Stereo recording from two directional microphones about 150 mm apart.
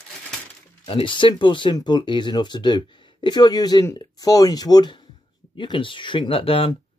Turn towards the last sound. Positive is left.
turn(degrees=40)  # may be behind; listen again after turning